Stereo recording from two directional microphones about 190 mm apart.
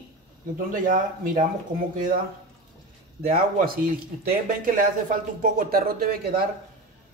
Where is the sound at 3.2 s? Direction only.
50° right (ahead or behind).